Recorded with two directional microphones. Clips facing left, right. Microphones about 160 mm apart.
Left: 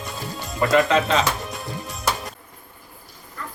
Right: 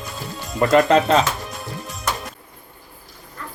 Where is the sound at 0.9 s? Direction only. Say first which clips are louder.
Right 4 dB; 40° right (ahead or behind).